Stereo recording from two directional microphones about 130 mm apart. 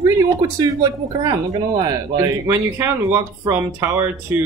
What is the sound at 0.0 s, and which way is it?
Speech, 25° right (ahead or behind).